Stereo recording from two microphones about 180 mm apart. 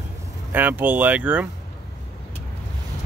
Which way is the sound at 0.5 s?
10° right (ahead or behind).